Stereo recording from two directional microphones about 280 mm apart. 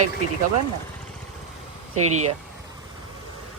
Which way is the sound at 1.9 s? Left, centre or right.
Right.